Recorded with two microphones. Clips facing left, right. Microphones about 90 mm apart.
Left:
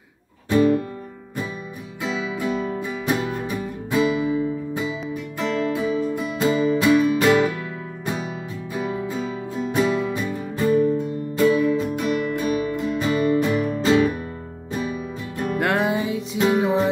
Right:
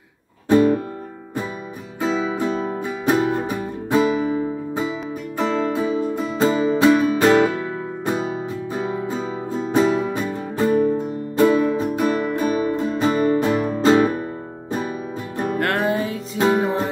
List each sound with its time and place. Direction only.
2.0 s music: 40° right (ahead or behind)
15.6 s music: 10° left (ahead or behind)
16.3 s music: 40° right (ahead or behind)